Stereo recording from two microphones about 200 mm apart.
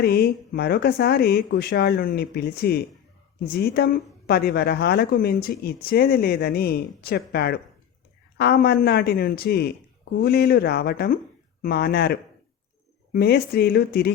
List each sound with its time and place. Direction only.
0.0 s speech: 50° left (ahead or behind)